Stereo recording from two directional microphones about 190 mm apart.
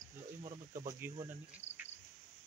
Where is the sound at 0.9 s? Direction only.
10° right (ahead or behind).